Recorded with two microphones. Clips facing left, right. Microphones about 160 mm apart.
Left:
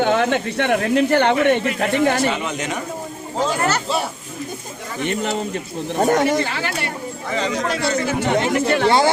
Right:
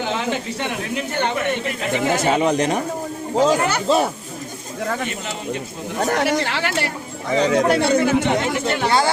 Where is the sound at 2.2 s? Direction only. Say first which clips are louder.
Right 5 dB; 40° right (ahead or behind).